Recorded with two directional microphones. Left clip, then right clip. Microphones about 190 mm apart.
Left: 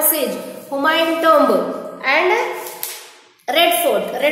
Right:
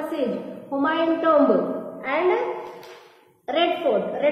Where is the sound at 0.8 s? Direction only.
15° left (ahead or behind).